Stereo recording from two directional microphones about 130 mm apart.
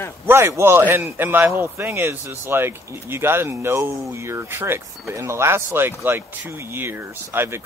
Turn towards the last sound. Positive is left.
turn(degrees=-20)  # may be behind; listen again after turning